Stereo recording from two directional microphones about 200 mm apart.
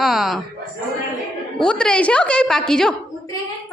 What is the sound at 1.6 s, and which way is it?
A woman's voice, 5° left (ahead or behind).